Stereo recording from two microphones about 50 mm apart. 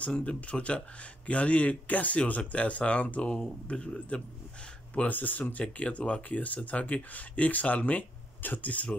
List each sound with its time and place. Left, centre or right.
0.0 s speech: left
4.9 s speech: left